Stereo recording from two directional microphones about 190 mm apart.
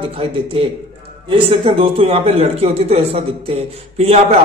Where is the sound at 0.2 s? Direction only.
30° right (ahead or behind).